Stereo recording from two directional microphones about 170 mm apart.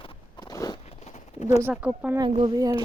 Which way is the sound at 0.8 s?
40° left (ahead or behind).